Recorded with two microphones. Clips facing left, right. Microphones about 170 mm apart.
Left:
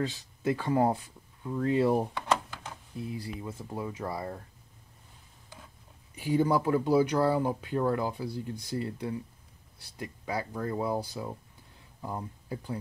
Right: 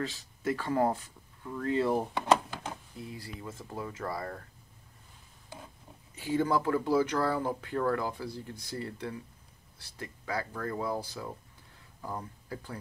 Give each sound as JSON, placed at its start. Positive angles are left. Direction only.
{"t": 0.4, "sound": "speech", "side_deg": 15}
{"t": 2.1, "sound": "a sound", "side_deg": -25}
{"t": 3.2, "sound": "speech", "side_deg": 15}
{"t": 6.1, "sound": "speech", "side_deg": 15}